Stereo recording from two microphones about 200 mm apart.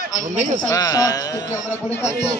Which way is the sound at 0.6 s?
15° left (ahead or behind).